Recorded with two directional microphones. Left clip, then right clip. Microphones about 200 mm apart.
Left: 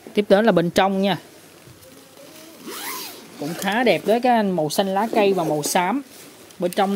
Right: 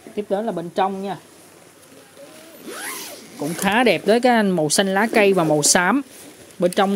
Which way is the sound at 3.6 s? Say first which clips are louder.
Right 2 dB; 15° right (ahead or behind).